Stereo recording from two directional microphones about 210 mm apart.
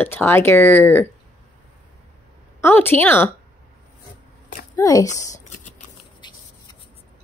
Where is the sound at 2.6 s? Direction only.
10° left (ahead or behind).